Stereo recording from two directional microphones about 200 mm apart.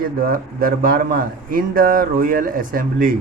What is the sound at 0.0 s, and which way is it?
Speech, 45° right (ahead or behind).